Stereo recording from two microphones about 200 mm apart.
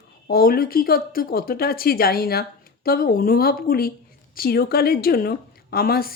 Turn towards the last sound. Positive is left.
turn(degrees=50)  # may be behind; listen again after turning